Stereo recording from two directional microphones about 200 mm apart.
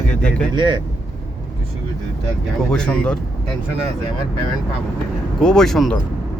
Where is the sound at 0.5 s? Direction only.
25° right (ahead or behind).